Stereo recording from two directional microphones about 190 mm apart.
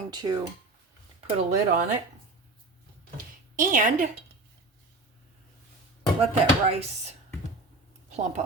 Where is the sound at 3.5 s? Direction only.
45° right (ahead or behind).